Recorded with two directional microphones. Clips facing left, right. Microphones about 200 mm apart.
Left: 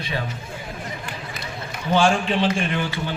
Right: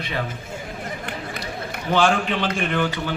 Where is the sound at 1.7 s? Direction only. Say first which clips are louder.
Left 1 dB; 60° right (ahead or behind).